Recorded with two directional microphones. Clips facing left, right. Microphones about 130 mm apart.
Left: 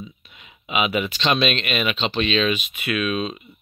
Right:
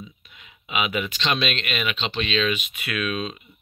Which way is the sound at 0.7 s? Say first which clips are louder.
Left 4 dB; 25° left (ahead or behind).